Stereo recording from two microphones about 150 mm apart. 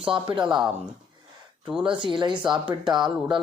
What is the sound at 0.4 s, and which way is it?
Speech, 5° right (ahead or behind).